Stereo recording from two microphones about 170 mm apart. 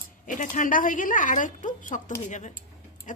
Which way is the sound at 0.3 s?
45° left (ahead or behind).